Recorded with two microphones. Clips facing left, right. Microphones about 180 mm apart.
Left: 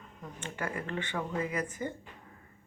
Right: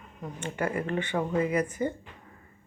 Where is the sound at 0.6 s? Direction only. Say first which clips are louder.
Right 7 dB; 30° right (ahead or behind).